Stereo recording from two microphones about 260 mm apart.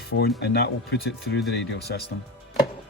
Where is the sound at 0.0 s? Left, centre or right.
Left.